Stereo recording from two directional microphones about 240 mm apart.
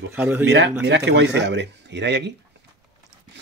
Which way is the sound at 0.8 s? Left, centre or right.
Right.